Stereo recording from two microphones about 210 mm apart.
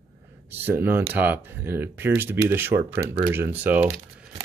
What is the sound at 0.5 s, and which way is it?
Speech, 10° right (ahead or behind).